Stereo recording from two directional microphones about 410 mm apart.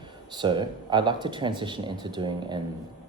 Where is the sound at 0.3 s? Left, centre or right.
Centre.